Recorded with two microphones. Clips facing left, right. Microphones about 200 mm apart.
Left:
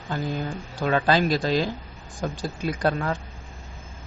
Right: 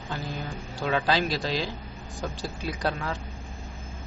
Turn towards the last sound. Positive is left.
turn(degrees=50)  # may be behind; listen again after turning